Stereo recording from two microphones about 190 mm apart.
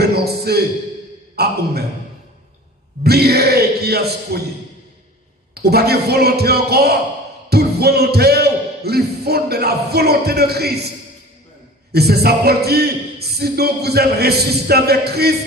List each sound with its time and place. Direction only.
0.0 s a man's voice: 55° right (ahead or behind)
3.0 s a man's voice: 55° right (ahead or behind)
5.5 s a man's voice: 55° right (ahead or behind)
7.5 s music: 55° right (ahead or behind)
11.9 s a man's voice: 55° right (ahead or behind)